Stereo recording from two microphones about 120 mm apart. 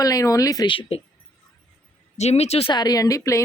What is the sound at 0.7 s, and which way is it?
Speech, 50° left (ahead or behind).